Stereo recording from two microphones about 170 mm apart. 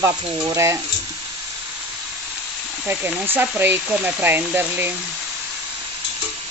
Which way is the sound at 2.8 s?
10° right (ahead or behind).